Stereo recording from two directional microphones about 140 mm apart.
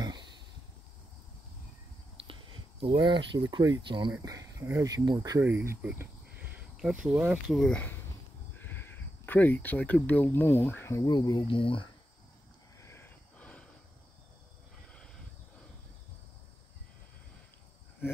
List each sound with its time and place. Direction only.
0.0 s a sound: 30° right (ahead or behind)
2.8 s speech: 35° right (ahead or behind)
4.2 s speech: 25° right (ahead or behind)
5.4 s speech: 15° right (ahead or behind)
7.5 s speech: 5° left (ahead or behind)
11.1 s speech: 30° left (ahead or behind)
12.8 s a sound: 15° left (ahead or behind)